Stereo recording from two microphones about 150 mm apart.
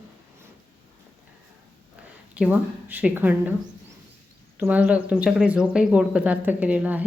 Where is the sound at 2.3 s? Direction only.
10° right (ahead or behind).